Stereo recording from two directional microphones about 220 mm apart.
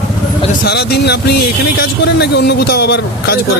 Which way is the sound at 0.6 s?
50° left (ahead or behind).